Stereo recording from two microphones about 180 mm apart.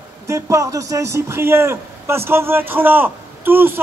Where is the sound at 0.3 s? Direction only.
15° right (ahead or behind).